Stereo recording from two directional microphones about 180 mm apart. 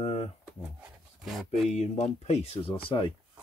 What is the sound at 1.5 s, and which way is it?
Speech, 40° left (ahead or behind).